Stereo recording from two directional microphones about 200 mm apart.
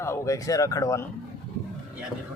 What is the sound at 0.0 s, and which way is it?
Speech, 15° left (ahead or behind).